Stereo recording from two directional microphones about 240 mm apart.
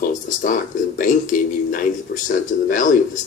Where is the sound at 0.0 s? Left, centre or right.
Left.